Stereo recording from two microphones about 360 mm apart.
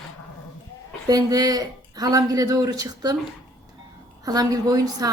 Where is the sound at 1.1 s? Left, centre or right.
Centre.